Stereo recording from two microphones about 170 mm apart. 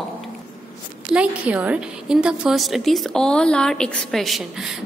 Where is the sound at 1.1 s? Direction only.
10° right (ahead or behind).